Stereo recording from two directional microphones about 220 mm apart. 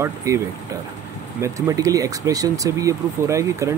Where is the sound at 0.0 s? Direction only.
15° right (ahead or behind).